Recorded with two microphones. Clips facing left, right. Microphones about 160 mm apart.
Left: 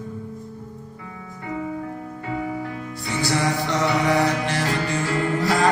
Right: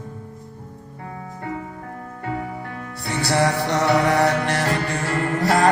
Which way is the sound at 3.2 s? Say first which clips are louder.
Right 3 dB; 65° right (ahead or behind).